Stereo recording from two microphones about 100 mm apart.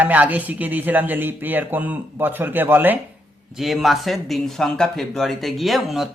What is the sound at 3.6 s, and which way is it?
Speech, centre (ahead or behind).